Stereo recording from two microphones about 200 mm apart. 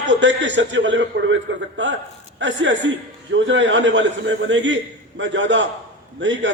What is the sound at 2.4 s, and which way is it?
A man's voice, 65° right (ahead or behind).